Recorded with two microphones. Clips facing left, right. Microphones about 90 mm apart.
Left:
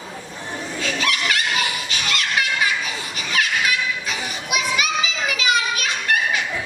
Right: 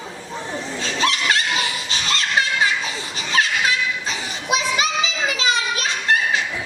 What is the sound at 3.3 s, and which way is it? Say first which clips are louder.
Children playing: right 2 dB; 30° right (ahead or behind).